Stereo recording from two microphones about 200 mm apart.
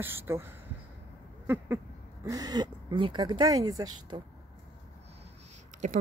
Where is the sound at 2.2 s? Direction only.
20° right (ahead or behind).